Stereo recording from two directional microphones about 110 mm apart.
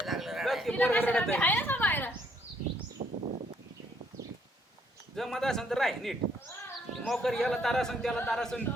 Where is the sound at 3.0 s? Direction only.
70° right (ahead or behind).